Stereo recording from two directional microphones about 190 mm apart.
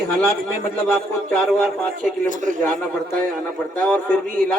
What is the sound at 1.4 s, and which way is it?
Speech, centre (ahead or behind).